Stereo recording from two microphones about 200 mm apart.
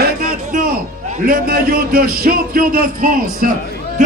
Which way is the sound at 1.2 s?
45° right (ahead or behind).